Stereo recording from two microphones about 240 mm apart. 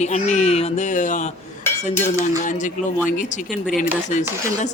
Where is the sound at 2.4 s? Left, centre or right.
Left.